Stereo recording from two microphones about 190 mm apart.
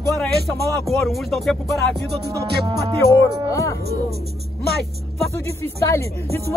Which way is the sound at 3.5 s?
15° left (ahead or behind).